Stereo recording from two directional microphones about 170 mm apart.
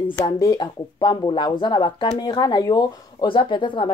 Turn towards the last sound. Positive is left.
turn(degrees=30)  # may be behind; listen again after turning